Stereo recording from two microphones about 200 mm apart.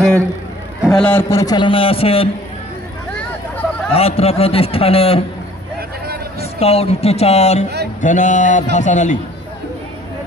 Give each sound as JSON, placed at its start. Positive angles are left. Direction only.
{"t": 0.9, "sound": "a man's voice", "side_deg": 10}
{"t": 3.9, "sound": "a man's voice", "side_deg": 30}
{"t": 6.4, "sound": "speech", "side_deg": 30}